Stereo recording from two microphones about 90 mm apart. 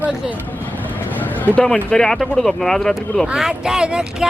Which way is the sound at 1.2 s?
20° left (ahead or behind).